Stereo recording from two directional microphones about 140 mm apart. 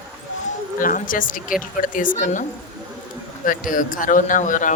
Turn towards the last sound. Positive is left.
turn(degrees=65)  # may be behind; listen again after turning